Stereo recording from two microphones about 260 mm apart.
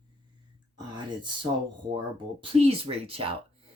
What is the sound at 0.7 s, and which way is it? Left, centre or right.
Speech, centre.